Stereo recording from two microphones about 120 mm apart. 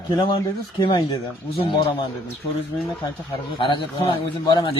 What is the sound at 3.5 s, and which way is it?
Speech, 45° left (ahead or behind).